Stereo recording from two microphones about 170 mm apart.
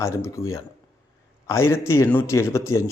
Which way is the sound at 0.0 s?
15° left (ahead or behind).